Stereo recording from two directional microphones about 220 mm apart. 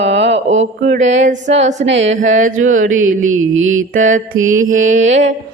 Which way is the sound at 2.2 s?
35° right (ahead or behind).